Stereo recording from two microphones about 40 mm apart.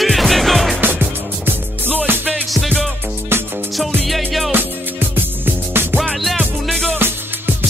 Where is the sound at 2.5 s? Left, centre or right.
Centre.